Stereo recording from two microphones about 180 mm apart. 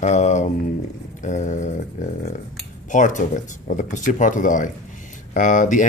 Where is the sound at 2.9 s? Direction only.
45° left (ahead or behind).